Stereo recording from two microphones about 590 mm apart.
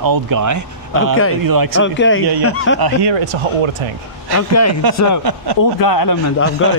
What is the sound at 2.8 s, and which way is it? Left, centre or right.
Speech, right.